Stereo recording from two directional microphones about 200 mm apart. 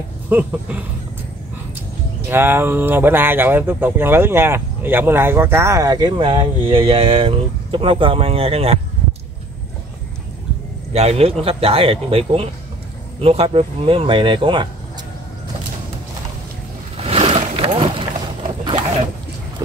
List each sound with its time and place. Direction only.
0.3 s speech: 10° right (ahead or behind)
2.2 s speech: 10° right (ahead or behind); by 8.7 s 30° right (ahead or behind)
10.9 s speech: 30° right (ahead or behind)
16.9 s vehicle: 30° right (ahead or behind)